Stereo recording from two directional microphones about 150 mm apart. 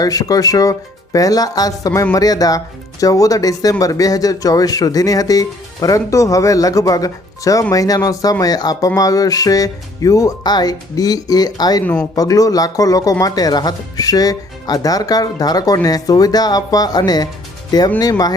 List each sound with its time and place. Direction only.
0.0 s speech: 25° left (ahead or behind)